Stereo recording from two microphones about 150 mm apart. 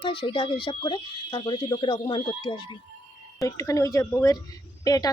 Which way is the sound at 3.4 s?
20° left (ahead or behind).